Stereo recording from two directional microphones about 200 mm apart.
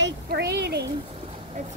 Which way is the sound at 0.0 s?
55° right (ahead or behind).